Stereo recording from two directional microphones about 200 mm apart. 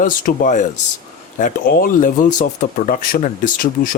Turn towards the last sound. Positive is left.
turn(degrees=40)  # may be behind; listen again after turning